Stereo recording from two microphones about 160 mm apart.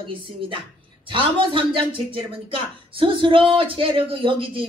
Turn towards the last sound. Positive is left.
turn(degrees=-35)  # may be behind; listen again after turning